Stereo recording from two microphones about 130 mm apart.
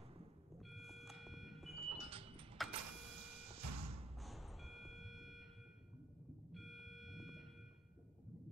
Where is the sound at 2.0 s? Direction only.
45° right (ahead or behind).